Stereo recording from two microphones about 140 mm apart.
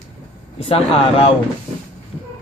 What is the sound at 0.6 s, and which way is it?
Speech, 45° left (ahead or behind).